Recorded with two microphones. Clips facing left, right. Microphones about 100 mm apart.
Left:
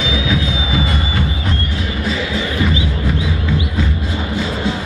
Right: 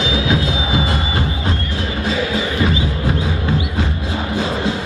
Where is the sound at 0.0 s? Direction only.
30° right (ahead or behind).